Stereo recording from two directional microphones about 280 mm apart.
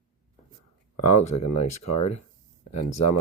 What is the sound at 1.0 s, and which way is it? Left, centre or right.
Speech, left.